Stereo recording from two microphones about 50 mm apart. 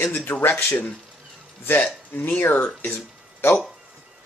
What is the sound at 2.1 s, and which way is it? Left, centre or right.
Speech, left.